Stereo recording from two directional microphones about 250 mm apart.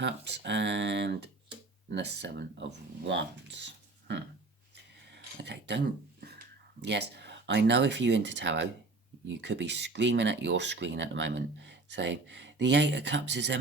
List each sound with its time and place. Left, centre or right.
0.0 s speech: right
5.1 s a sound: right
6.8 s speech: right